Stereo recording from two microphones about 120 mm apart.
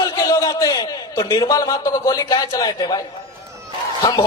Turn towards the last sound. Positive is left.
turn(degrees=40)  # may be behind; listen again after turning